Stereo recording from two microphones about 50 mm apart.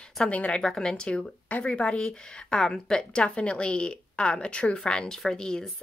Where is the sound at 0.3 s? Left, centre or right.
Left.